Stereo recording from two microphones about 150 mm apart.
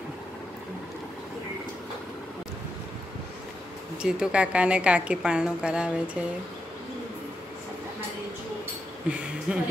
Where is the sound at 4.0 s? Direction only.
5° right (ahead or behind).